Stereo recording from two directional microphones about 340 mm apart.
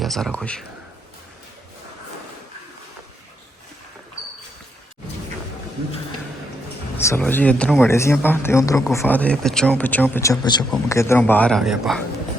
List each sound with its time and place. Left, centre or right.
0.0 s speech: centre
6.9 s speech: centre